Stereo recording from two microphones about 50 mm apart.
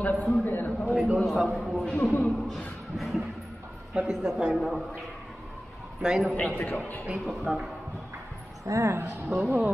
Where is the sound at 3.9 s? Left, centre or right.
Centre.